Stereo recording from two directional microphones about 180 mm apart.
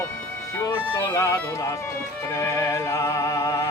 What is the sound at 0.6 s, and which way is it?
Speech, 20° left (ahead or behind).